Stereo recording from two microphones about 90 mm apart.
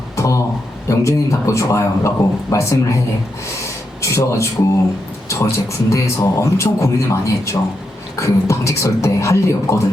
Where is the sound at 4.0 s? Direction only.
35° left (ahead or behind).